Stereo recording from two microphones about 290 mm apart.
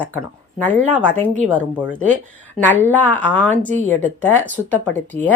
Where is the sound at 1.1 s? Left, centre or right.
Right.